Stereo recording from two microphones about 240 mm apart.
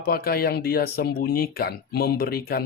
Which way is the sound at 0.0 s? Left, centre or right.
Left.